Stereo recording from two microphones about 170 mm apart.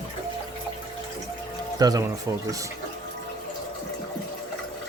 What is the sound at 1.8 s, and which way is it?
Speech, 20° right (ahead or behind).